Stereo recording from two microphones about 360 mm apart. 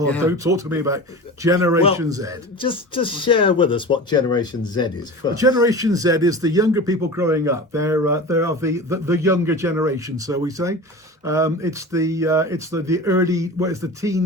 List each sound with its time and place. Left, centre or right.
0.3 s speech: centre
2.6 s speech: centre
5.3 s speech: centre